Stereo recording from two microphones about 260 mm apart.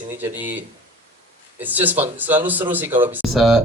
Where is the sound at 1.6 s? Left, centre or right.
Centre.